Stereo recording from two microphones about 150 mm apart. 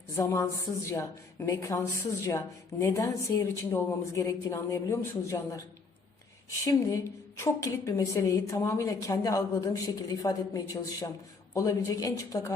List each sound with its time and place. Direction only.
0.2 s a woman's voice: 20° left (ahead or behind)
6.7 s a woman's voice: 20° left (ahead or behind)